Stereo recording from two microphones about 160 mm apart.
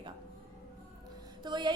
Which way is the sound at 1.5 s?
30° right (ahead or behind).